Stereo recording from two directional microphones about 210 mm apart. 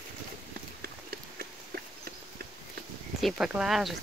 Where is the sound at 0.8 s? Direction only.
45° right (ahead or behind).